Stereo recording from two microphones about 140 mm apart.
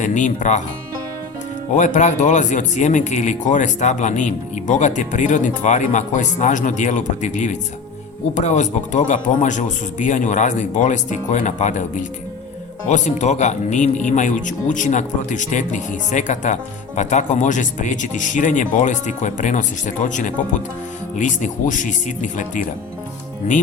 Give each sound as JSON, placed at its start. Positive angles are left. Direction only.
{"t": 0.0, "sound": "speech", "side_deg": 60}
{"t": 1.7, "sound": "speech", "side_deg": 65}